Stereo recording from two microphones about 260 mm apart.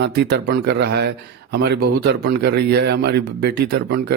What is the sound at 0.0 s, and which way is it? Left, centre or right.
A man's voice, right.